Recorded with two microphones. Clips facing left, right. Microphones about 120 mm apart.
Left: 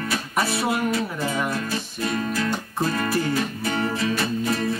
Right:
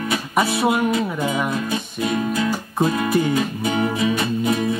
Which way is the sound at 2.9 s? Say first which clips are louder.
Right 4 dB; 15° right (ahead or behind).